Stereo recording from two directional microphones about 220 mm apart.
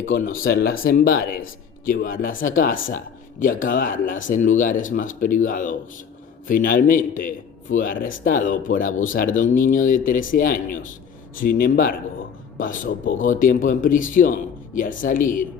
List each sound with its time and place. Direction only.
0.1 s a man's voice: 40° left (ahead or behind)